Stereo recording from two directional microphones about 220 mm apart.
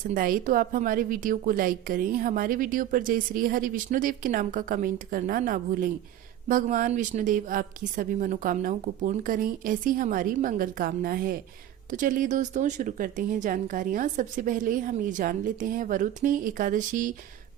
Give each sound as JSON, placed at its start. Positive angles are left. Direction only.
{"t": 0.0, "sound": "a woman's voice", "side_deg": -40}